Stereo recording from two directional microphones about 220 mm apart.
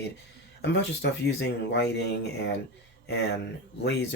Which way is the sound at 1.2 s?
50° left (ahead or behind).